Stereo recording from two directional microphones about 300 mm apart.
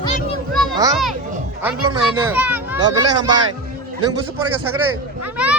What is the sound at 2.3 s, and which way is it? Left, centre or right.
Speech, centre.